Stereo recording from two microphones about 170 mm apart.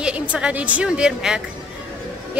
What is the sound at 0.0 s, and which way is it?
A woman's voice, 5° right (ahead or behind).